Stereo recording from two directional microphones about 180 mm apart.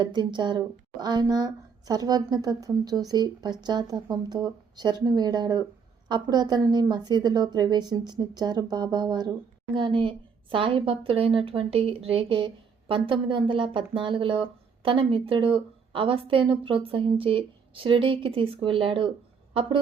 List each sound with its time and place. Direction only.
0.0 s a woman's voice: 25° right (ahead or behind)